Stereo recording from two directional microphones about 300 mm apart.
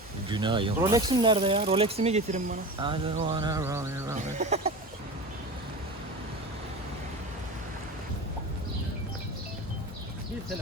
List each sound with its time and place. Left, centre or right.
0.3 s speech: centre
4.4 s speech: right